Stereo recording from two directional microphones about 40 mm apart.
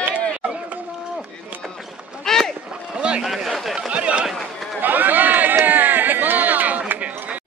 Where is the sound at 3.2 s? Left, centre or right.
Centre.